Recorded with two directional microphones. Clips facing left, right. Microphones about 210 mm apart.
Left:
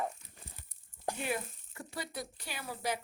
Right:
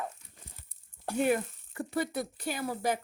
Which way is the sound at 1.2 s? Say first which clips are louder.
Right 12 dB; 50° right (ahead or behind).